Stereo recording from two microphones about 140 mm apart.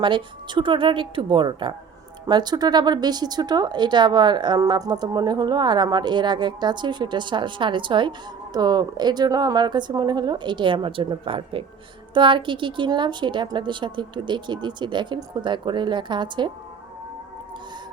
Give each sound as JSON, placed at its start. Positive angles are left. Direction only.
{"t": 0.0, "sound": "speech", "side_deg": -35}